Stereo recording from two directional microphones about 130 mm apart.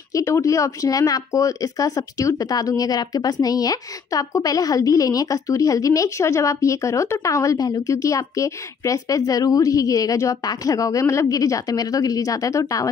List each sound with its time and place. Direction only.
0.1 s speech: 25° left (ahead or behind)